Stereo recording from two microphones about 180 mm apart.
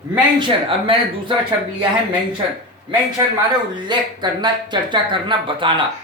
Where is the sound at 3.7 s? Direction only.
25° right (ahead or behind).